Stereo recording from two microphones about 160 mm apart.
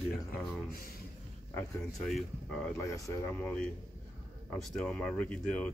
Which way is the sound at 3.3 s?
5° left (ahead or behind).